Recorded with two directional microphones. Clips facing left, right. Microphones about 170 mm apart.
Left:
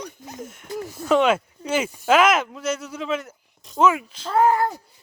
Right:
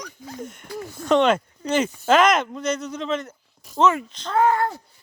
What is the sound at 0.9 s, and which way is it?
Speech, 5° left (ahead or behind).